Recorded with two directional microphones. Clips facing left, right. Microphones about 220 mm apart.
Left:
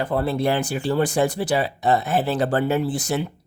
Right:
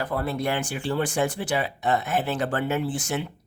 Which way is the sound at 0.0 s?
30° left (ahead or behind).